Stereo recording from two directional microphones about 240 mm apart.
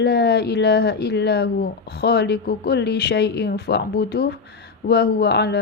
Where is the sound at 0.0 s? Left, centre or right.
Left.